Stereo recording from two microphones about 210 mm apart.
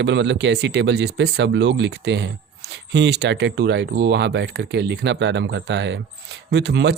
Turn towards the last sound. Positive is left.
turn(degrees=-55)  # may be behind; listen again after turning